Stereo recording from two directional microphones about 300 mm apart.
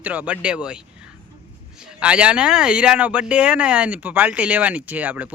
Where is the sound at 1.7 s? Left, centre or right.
Centre.